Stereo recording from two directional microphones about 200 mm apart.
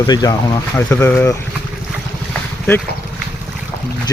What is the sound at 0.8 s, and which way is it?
Speech, 10° left (ahead or behind).